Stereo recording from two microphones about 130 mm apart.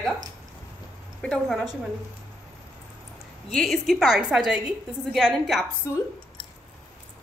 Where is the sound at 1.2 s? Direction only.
5° left (ahead or behind).